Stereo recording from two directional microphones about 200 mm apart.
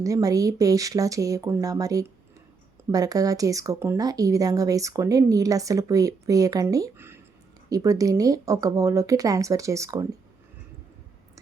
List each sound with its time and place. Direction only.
0.0 s speech: 15° right (ahead or behind)